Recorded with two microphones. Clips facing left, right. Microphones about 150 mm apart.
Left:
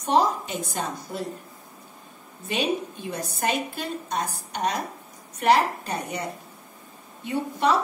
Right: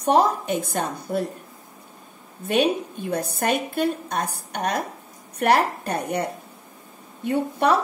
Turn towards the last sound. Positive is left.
turn(degrees=-55)  # may be behind; listen again after turning